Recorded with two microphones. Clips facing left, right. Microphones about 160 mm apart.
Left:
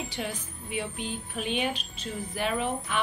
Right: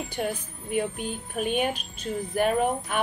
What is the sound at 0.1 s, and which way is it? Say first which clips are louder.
A woman's voice: right 5 dB; 50° right (ahead or behind).